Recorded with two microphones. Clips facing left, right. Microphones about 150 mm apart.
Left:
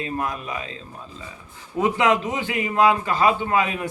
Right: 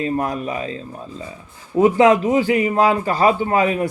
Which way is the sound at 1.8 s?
35° right (ahead or behind).